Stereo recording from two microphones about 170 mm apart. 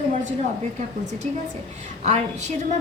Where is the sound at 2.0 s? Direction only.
45° right (ahead or behind).